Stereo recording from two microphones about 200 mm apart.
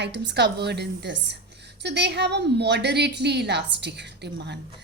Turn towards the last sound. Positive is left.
turn(degrees=-55)  # may be behind; listen again after turning